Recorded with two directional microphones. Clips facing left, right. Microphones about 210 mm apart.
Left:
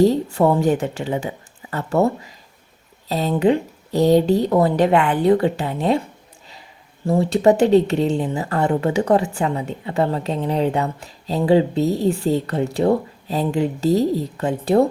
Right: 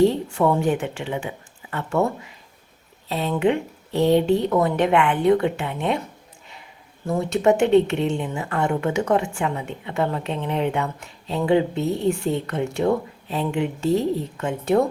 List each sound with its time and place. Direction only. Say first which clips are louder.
0.0 s speech: left 3 dB; 40° left (ahead or behind)
7.1 s speech: left 4 dB; 30° left (ahead or behind)